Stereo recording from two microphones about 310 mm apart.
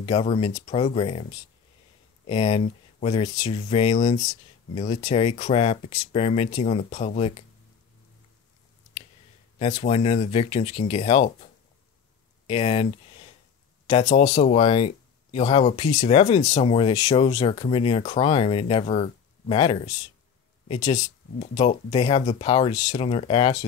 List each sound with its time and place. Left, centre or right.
0.0 s speech: centre
2.2 s speech: centre
9.6 s speech: left
12.4 s speech: centre